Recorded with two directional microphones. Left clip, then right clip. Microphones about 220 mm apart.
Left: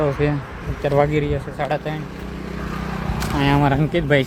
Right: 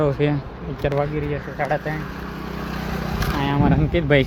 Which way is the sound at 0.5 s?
25° left (ahead or behind).